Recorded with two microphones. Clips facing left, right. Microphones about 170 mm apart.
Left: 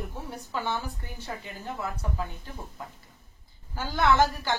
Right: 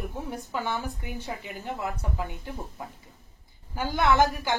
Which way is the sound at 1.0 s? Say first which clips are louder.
Right 3 dB; 15° right (ahead or behind).